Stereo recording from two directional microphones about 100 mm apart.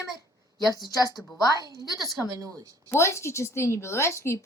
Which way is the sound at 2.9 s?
30° left (ahead or behind).